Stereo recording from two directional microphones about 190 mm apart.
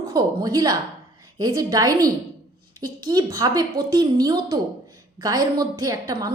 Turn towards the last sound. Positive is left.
turn(degrees=-20)  # may be behind; listen again after turning